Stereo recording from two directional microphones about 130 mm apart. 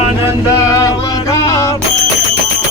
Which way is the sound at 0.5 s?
25° left (ahead or behind).